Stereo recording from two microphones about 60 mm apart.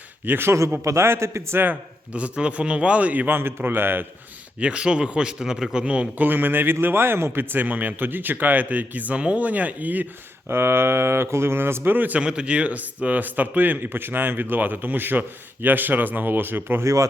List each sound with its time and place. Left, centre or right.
0.3 s a man's voice: right
2.1 s a man's voice: centre; by 4.0 s right
4.6 s a man's voice: centre
6.2 s a man's voice: right
7.5 s a man's voice: right
10.5 s speech: right
12.2 s a man's voice: centre; by 16.8 s right
16.8 s speech: right